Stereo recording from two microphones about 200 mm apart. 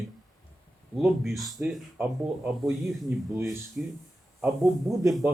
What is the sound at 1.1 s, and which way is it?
Speech, centre (ahead or behind).